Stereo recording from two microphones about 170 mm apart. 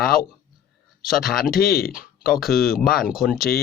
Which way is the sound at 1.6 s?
60° left (ahead or behind).